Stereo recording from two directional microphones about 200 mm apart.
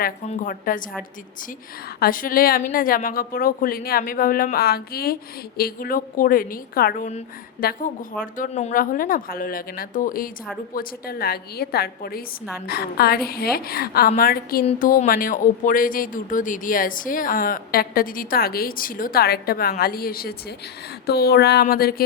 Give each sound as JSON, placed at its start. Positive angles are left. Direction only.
{"t": 0.3, "sound": "speech", "side_deg": 40}
{"t": 2.0, "sound": "speech", "side_deg": 45}